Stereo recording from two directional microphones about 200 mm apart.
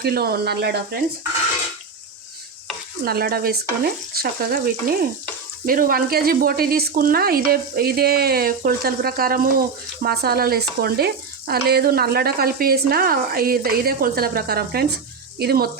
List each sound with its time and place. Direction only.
0.0 s speech: 50° right (ahead or behind)
3.0 s speech: 50° right (ahead or behind)